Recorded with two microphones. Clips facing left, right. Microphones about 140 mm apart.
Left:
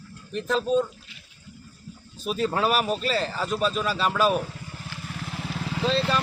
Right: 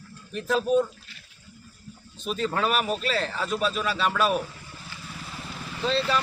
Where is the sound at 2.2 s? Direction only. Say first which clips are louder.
Left 2 dB; 5° left (ahead or behind).